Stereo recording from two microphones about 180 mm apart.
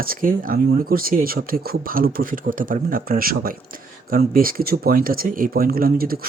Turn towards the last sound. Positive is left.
turn(degrees=-55)  # may be behind; listen again after turning